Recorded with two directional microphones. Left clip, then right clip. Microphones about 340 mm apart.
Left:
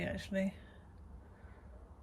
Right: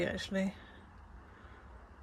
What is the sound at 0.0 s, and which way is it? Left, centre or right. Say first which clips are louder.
Speech: right 3 dB; centre.